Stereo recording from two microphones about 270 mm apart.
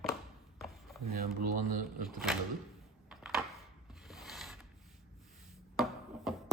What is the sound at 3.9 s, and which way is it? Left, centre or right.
Pulleys, centre.